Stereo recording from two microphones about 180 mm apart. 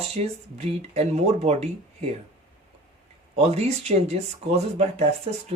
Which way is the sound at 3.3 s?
35° right (ahead or behind).